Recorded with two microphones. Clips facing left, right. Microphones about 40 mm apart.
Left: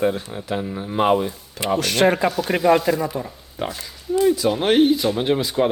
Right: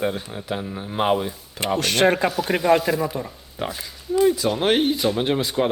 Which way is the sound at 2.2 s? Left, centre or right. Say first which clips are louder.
Left 1 dB; centre.